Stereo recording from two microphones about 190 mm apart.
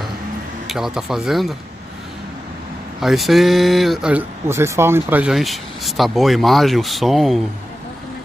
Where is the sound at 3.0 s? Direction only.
Centre (ahead or behind).